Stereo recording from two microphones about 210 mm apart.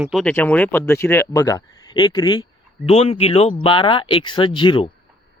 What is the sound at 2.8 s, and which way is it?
Speech, 30° left (ahead or behind).